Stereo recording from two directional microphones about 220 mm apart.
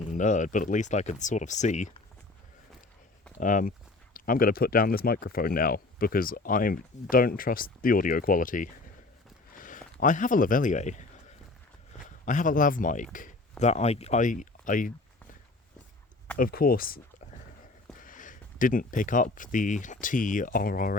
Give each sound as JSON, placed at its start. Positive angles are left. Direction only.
{"t": 0.0, "sound": "speech", "side_deg": 35}
{"t": 3.3, "sound": "speech", "side_deg": 35}
{"t": 12.0, "sound": "speech", "side_deg": 35}
{"t": 16.4, "sound": "speech", "side_deg": 45}
{"t": 18.0, "sound": "speech", "side_deg": 35}